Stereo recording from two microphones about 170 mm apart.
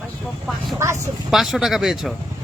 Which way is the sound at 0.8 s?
15° right (ahead or behind).